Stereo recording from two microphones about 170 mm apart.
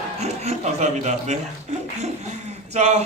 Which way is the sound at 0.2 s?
40° right (ahead or behind).